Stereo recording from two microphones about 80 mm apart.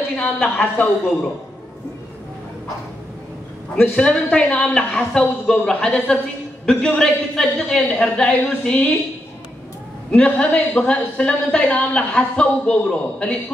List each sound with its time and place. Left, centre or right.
0.2 s a woman's voice: left
3.7 s a woman's voice: centre
10.1 s a woman's voice: centre